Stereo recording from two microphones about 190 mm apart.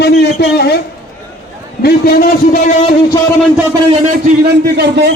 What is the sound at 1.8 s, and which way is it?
Speech, 55° left (ahead or behind).